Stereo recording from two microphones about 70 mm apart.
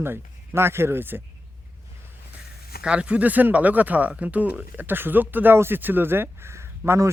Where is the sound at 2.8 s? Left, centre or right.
Centre; by 7.1 s right.